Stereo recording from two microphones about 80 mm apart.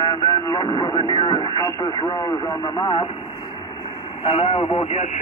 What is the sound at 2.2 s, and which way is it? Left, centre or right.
Speech, left.